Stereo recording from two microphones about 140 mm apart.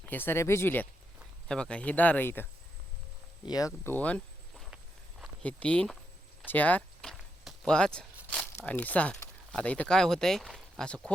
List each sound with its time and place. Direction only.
0.1 s speech: 15° left (ahead or behind)
3.4 s speech: 25° left (ahead or behind)
3.8 s a sound: 10° left (ahead or behind)
5.4 s speech: 10° left (ahead or behind)
6.5 s a sound: 10° left (ahead or behind)
8.5 s speech: 15° left (ahead or behind)